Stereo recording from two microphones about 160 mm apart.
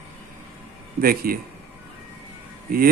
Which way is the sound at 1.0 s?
65° right (ahead or behind).